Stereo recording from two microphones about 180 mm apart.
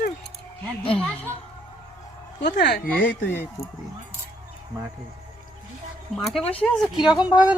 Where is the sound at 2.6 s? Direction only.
65° left (ahead or behind).